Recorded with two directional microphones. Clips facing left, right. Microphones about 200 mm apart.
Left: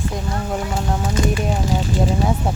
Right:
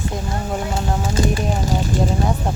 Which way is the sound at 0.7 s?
35° right (ahead or behind).